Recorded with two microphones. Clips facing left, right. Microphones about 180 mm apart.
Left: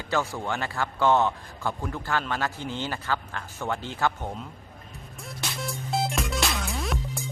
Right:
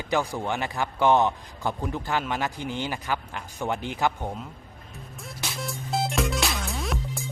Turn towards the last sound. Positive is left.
turn(degrees=0)  # may be behind; listen again after turning